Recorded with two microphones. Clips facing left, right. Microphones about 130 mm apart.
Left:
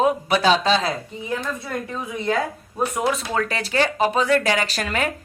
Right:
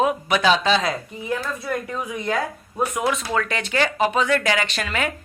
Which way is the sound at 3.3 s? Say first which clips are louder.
Left 1 dB; 35° left (ahead or behind).